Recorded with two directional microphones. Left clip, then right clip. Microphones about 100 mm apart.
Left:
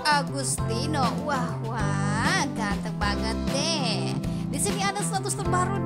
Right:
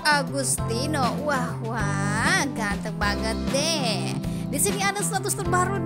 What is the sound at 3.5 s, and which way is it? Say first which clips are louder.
Speech: right 3 dB; 40° right (ahead or behind).